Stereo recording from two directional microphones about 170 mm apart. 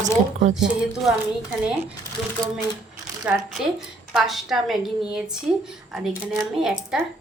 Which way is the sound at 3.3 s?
10° right (ahead or behind).